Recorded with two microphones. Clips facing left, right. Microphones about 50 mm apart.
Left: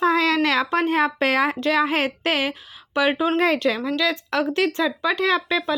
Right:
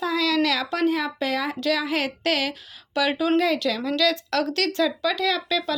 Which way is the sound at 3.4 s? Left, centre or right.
Left.